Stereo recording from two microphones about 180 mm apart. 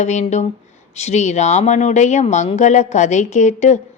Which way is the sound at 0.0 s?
40° left (ahead or behind).